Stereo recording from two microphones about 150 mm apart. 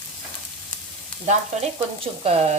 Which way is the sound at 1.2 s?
45° right (ahead or behind).